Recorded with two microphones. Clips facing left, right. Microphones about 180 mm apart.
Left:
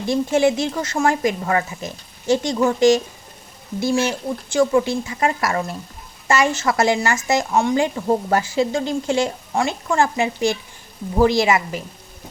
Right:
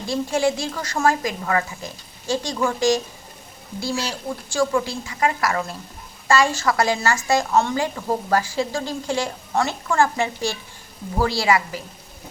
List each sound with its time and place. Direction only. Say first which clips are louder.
0.1 s speech: left 4 dB; 20° left (ahead or behind)